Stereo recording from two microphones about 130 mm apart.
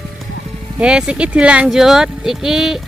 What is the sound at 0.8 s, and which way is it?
Speech, 5° right (ahead or behind).